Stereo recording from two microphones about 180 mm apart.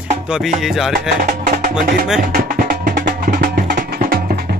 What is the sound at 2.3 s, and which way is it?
Music, 50° right (ahead or behind).